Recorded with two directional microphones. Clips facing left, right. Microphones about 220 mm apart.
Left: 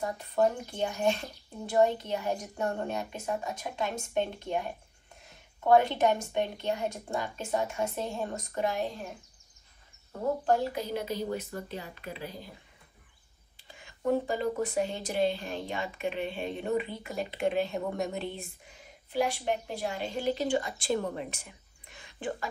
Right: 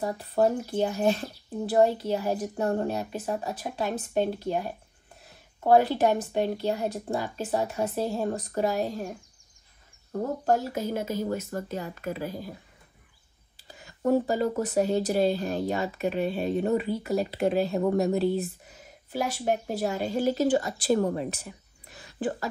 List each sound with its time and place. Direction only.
0.0 s speech: 35° right (ahead or behind)
10.4 s speech: 45° right (ahead or behind)
13.6 s a woman's voice: 40° right (ahead or behind)